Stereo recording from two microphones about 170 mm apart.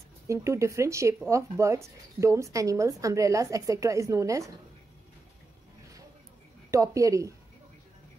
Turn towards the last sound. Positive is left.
turn(degrees=-20)  # may be behind; listen again after turning